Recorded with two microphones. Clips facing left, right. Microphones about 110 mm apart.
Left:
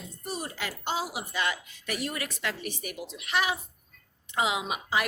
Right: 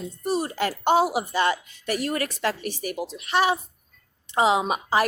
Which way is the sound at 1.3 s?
35° right (ahead or behind).